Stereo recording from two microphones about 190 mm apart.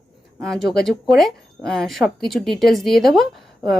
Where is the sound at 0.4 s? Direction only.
Centre (ahead or behind).